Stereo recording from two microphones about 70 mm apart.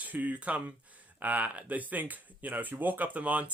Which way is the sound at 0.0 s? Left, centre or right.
Right.